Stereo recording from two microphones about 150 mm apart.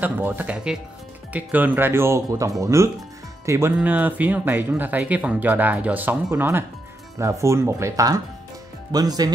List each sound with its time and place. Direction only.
0.0 s speech: 10° right (ahead or behind)